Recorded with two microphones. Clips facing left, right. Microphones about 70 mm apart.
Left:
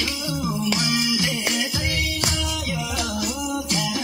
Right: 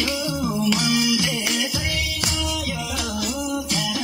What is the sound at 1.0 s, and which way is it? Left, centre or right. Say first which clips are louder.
Music: right 2 dB; left.